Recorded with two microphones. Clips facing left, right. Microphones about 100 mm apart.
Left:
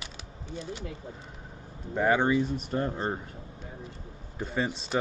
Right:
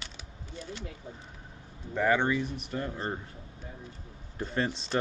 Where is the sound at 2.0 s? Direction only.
20° left (ahead or behind).